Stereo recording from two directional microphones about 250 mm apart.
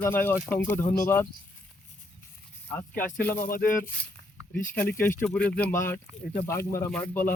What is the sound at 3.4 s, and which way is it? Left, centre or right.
Speech, left.